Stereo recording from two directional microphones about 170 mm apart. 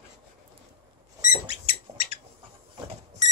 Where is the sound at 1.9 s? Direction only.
35° right (ahead or behind).